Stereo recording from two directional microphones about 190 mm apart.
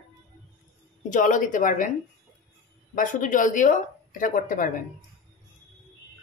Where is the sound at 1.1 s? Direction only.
40° left (ahead or behind).